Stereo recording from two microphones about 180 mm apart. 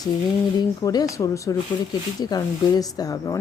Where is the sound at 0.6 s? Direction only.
20° left (ahead or behind).